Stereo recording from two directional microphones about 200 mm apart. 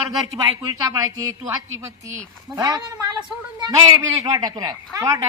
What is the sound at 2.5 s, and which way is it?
A woman's voice, 15° right (ahead or behind).